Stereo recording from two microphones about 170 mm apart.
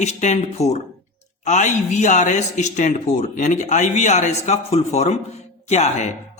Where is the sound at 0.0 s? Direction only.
40° left (ahead or behind).